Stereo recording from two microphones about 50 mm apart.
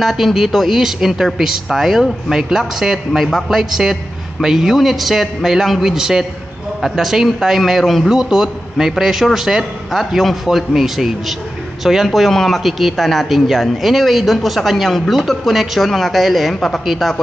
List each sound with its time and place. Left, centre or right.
0.0 s a man's voice: centre
8.1 s a man's voice: centre